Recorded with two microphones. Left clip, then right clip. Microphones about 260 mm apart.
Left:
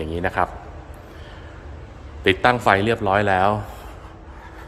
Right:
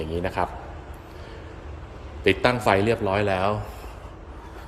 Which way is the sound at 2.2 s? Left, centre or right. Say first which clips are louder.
Left 4 dB; centre.